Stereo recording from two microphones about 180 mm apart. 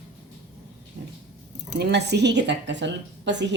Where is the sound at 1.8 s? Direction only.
70° right (ahead or behind).